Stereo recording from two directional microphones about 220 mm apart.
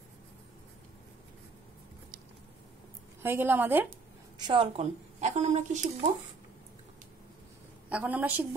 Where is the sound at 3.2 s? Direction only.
10° right (ahead or behind).